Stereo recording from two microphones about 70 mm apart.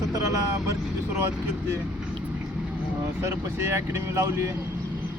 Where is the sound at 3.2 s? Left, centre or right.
Right.